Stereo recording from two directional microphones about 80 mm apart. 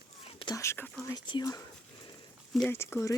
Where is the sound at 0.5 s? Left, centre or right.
Left.